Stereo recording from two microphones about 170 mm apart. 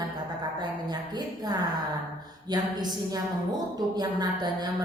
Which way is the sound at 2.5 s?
25° right (ahead or behind).